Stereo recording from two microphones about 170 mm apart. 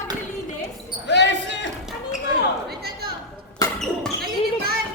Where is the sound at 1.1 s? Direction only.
90° left.